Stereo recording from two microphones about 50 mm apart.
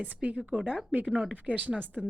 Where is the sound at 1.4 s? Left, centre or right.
Right.